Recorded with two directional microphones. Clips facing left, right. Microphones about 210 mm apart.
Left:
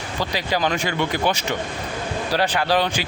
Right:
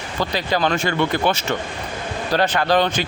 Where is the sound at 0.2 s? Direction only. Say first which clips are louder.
Right 2 dB; 10° left (ahead or behind).